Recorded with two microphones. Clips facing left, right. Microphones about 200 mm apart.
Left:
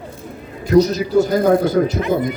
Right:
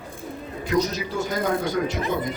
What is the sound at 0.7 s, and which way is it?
Speech, 35° left (ahead or behind).